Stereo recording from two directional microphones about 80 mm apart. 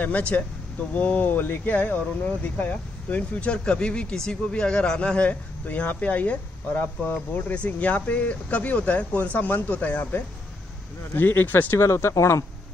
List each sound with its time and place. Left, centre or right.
0.0 s speech: centre; by 12.4 s left